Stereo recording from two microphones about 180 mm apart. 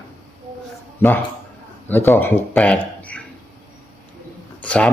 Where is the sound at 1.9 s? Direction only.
10° left (ahead or behind).